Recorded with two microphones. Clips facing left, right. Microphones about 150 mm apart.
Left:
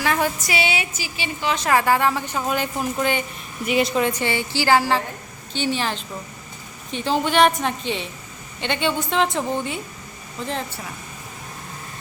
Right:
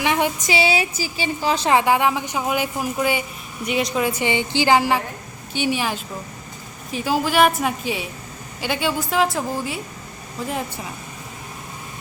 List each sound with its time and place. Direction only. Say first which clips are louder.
0.0 s a woman's voice: right 1 dB; 15° right (ahead or behind); by 1.7 s 35° right (ahead or behind)
1.7 s a woman's voice: even; 15° right (ahead or behind)
3.6 s a woman's voice: left 2 dB; centre (ahead or behind)